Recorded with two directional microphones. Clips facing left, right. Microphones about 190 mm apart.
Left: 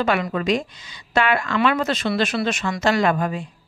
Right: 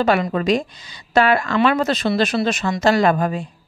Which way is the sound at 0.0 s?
35° right (ahead or behind).